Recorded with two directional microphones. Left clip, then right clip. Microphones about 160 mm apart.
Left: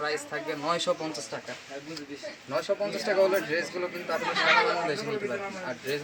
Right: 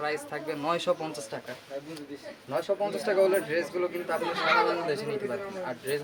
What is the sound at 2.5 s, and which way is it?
A man's voice, 10° right (ahead or behind).